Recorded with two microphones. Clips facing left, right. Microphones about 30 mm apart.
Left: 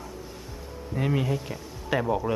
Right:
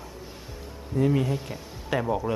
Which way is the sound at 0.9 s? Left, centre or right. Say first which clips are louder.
Right 5 dB; centre.